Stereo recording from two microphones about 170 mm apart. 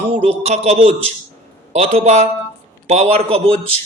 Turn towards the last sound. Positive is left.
turn(degrees=-35)  # may be behind; listen again after turning